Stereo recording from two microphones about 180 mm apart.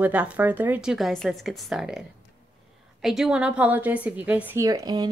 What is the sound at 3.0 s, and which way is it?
A woman's voice, centre (ahead or behind).